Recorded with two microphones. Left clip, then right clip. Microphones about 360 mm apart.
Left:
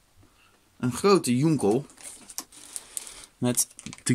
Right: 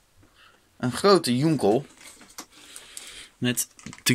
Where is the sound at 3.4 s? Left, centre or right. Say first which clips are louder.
Even; centre.